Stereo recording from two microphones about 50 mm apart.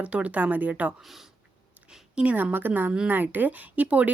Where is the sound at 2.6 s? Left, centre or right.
Right.